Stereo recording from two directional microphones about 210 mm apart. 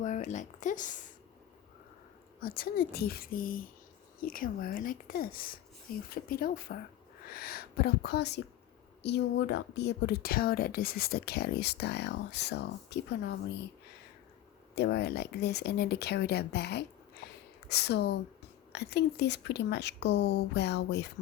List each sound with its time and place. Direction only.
0.0 s speech: 35° left (ahead or behind)
2.4 s speech: 45° left (ahead or behind)
14.8 s speech: 50° left (ahead or behind)